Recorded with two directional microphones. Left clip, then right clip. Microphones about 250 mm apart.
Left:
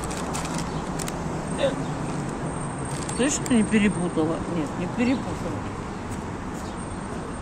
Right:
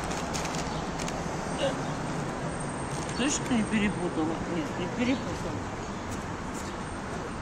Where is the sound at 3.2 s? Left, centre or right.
Left.